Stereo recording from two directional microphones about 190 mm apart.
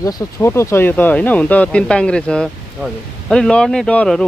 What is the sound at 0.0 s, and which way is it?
Speech, 15° left (ahead or behind).